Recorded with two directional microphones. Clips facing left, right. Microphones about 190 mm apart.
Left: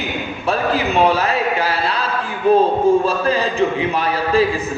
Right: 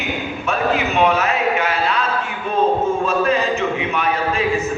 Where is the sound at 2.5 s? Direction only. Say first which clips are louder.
Left 5 dB; 35° left (ahead or behind).